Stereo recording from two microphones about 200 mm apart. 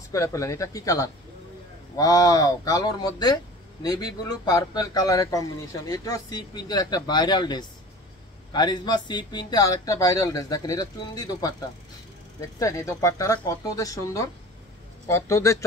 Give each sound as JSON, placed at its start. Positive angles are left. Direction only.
{"t": 0.1, "sound": "speech", "side_deg": 15}